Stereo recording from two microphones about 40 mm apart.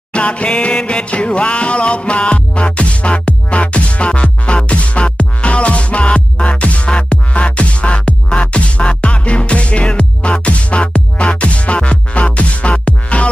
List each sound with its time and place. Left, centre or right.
0.1 s music: left